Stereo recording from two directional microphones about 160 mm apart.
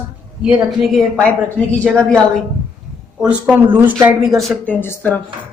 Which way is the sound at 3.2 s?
10° right (ahead or behind).